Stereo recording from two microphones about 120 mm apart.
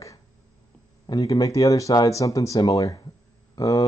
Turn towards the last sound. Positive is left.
turn(degrees=30)  # may be behind; listen again after turning